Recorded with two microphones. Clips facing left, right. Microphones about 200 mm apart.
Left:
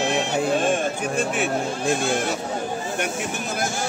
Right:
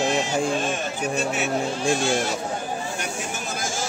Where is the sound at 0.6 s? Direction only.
50° left (ahead or behind).